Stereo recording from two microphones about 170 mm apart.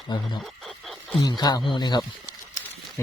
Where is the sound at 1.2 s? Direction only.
25° left (ahead or behind).